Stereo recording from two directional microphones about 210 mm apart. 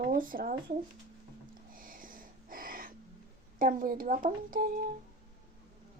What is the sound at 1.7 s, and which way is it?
Wheeze, 40° right (ahead or behind).